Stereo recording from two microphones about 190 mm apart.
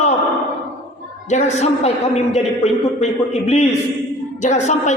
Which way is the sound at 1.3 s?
35° left (ahead or behind).